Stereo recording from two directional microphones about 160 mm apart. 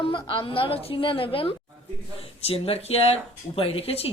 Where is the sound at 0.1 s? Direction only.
30° left (ahead or behind).